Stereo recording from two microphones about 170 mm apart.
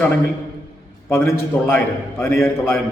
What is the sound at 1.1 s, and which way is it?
A man's voice, 15° left (ahead or behind).